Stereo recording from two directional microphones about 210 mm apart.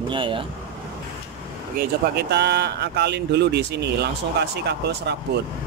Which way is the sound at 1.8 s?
50° right (ahead or behind).